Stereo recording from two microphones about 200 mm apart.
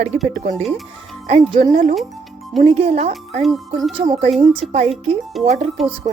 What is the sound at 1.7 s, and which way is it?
Speech, 40° right (ahead or behind).